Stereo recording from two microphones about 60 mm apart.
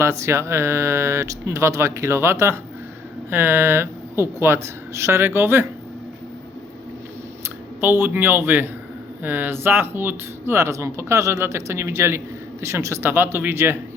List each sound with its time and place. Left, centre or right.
0.0 s speech: right
3.2 s speech: right
7.8 s a man's voice: right
13.0 s a man's voice: right